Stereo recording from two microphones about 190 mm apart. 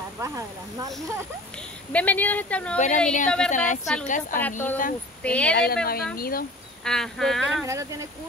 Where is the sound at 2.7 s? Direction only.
40° left (ahead or behind).